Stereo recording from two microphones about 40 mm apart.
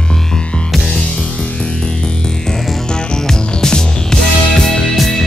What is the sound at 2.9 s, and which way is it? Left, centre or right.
Music, centre.